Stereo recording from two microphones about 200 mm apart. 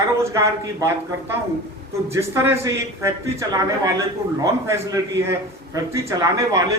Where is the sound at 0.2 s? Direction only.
15° right (ahead or behind).